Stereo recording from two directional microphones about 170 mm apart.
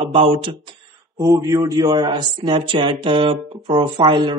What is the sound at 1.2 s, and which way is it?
Speech, 20° right (ahead or behind).